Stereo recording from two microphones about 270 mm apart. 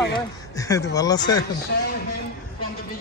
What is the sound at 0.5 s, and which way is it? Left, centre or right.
Speech, centre.